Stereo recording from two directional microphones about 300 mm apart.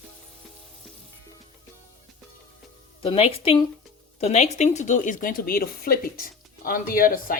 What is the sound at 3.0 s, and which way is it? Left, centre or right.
Speech, centre.